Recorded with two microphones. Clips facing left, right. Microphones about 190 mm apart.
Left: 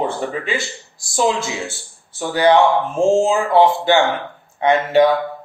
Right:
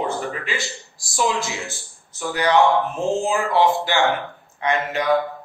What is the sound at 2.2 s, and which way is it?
Speech, 30° left (ahead or behind).